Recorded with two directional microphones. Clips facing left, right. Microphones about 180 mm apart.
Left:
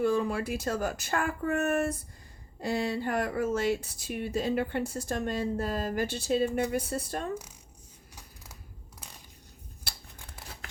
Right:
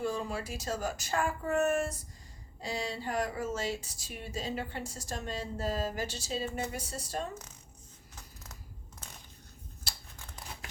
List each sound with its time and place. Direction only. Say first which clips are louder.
0.0 s speech: left 7 dB; 60° left (ahead or behind)